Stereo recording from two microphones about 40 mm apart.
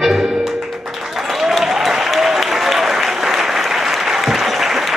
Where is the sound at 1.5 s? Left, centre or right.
Centre.